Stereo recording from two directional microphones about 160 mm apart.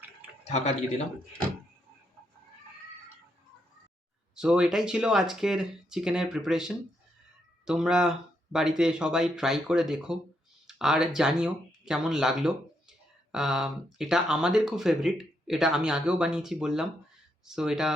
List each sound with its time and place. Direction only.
0.4 s speech: 45° left (ahead or behind)
4.4 s speech: 5° right (ahead or behind)